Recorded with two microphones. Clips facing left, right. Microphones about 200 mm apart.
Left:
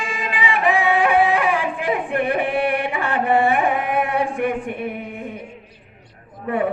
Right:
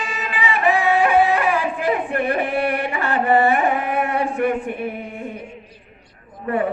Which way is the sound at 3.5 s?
15° left (ahead or behind).